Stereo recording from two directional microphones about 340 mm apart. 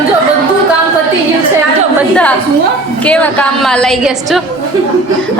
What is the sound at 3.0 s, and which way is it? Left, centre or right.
A woman's voice, centre.